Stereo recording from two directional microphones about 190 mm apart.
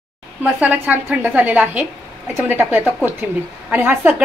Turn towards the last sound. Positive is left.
turn(degrees=-10)  # may be behind; listen again after turning